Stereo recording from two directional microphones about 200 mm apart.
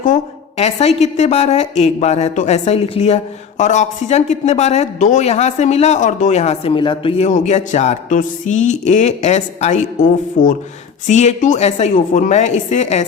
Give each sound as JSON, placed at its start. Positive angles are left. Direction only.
{"t": 0.0, "sound": "speech", "side_deg": 35}